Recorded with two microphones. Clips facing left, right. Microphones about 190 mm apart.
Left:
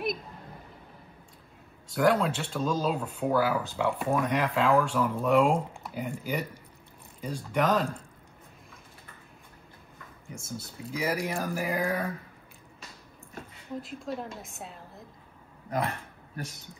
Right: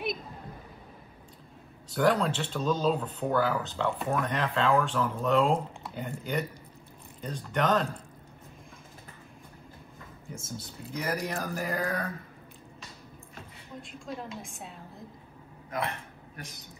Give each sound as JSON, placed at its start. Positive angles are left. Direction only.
{"t": 1.9, "sound": "speech", "side_deg": 0}
{"t": 10.3, "sound": "speech", "side_deg": 0}
{"t": 13.8, "sound": "speech", "side_deg": 0}
{"t": 15.7, "sound": "speech", "side_deg": 35}